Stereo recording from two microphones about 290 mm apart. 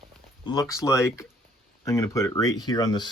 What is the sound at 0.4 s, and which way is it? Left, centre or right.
Speech, centre.